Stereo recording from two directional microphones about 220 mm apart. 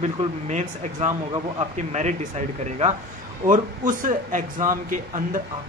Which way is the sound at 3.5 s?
35° right (ahead or behind).